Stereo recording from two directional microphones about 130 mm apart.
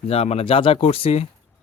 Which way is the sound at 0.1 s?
50° left (ahead or behind).